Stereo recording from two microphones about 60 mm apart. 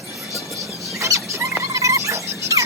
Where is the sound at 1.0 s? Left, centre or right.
Right.